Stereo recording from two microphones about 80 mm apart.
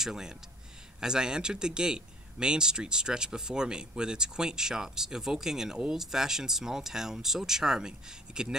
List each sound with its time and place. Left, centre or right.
0.0 s speech: centre